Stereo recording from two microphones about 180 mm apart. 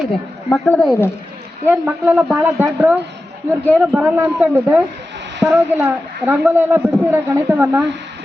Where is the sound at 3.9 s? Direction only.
10° right (ahead or behind).